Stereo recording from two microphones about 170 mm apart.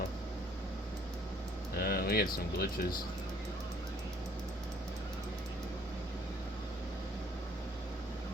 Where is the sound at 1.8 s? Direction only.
65° left (ahead or behind).